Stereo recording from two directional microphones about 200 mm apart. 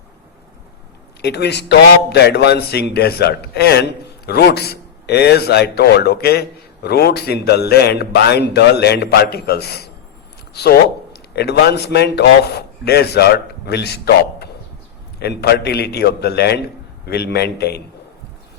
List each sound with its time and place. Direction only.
1.2 s a man's voice: 55° left (ahead or behind)